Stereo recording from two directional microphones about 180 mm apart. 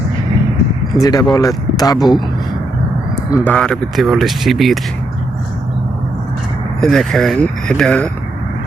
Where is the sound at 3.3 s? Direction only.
10° left (ahead or behind).